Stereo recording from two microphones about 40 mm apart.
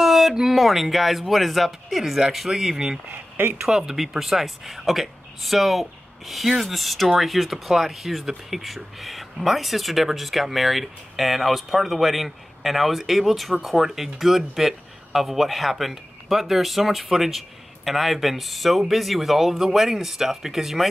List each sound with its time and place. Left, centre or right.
0.0 s a sound: centre
0.6 s speech: centre
3.1 s speech: right
3.6 s speech: centre